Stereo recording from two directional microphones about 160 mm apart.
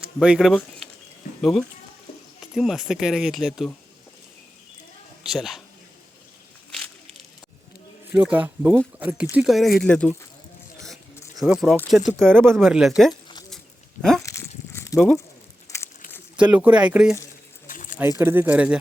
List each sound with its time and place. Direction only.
0.2 s speech: centre (ahead or behind)
5.2 s a man's voice: centre (ahead or behind)
6.7 s a sound: 5° left (ahead or behind)
8.1 s speech: 10° right (ahead or behind); by 10.2 s 5° left (ahead or behind)
10.8 s a sound: centre (ahead or behind)
11.3 s speech: centre (ahead or behind)
12.1 s speech: 15° right (ahead or behind)
12.5 s speech: centre (ahead or behind)
14.2 s a sound: 20° left (ahead or behind)
14.9 s speech: centre (ahead or behind)
16.4 s speech: 10° right (ahead or behind)
17.7 s a sound: 55° left (ahead or behind)
18.2 s speech: 15° right (ahead or behind)